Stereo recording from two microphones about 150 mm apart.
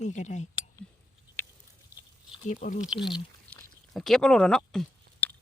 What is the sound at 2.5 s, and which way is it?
Speech, 55° left (ahead or behind).